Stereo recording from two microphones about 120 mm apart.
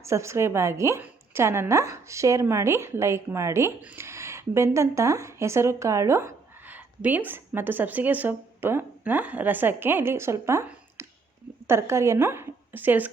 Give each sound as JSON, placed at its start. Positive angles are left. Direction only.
{"t": 0.0, "sound": "a woman's voice", "side_deg": -25}
{"t": 11.0, "sound": "a sound", "side_deg": -20}
{"t": 11.6, "sound": "a woman's voice", "side_deg": -20}